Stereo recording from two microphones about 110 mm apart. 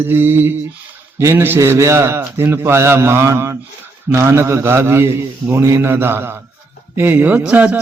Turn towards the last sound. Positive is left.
turn(degrees=-15)  # may be behind; listen again after turning